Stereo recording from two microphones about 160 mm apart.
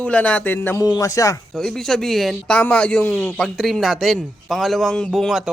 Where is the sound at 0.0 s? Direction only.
10° left (ahead or behind).